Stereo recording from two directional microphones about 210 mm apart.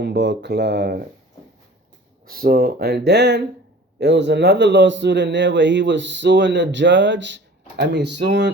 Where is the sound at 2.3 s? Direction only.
45° right (ahead or behind).